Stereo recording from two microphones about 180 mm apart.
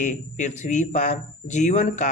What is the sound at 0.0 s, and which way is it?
Speech, 45° left (ahead or behind).